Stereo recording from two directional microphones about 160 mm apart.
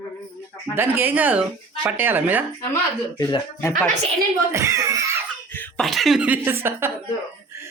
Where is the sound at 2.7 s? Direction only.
25° left (ahead or behind).